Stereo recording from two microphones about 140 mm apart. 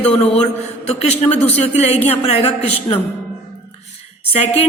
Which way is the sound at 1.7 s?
50° left (ahead or behind).